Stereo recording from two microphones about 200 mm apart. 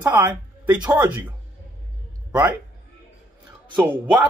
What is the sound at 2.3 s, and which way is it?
Speech, 10° right (ahead or behind).